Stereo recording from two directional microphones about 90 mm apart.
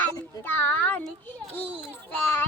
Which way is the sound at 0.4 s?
20° left (ahead or behind).